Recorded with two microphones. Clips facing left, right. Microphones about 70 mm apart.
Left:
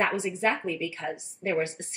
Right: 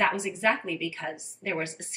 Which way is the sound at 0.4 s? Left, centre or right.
Left.